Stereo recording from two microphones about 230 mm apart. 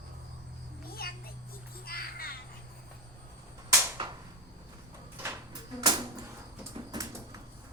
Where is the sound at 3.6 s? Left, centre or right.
Centre.